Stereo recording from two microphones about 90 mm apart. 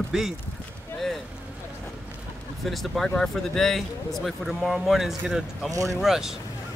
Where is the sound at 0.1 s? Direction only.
5° right (ahead or behind).